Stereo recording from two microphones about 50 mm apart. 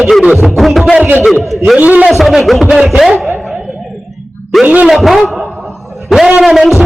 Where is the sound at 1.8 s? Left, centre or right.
Right.